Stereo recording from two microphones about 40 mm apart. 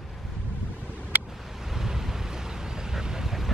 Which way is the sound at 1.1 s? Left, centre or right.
Right.